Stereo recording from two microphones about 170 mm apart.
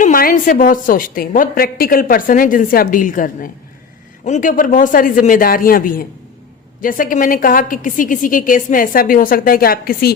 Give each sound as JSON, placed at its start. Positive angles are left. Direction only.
{"t": 0.0, "sound": "a woman's voice", "side_deg": 55}